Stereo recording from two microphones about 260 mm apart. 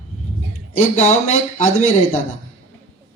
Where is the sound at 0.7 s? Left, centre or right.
Left.